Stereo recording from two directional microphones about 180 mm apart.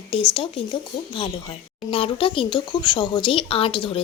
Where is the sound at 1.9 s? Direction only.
30° left (ahead or behind).